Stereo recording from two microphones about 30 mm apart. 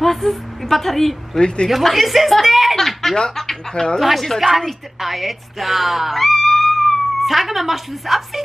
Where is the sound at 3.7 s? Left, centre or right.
Left.